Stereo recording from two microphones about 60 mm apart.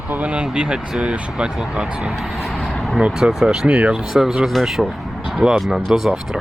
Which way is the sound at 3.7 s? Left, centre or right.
Right.